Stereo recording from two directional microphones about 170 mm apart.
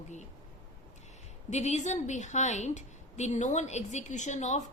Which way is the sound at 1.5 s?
40° left (ahead or behind).